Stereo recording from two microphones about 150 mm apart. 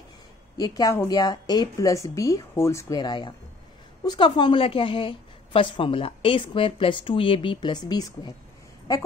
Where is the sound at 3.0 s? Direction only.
30° left (ahead or behind).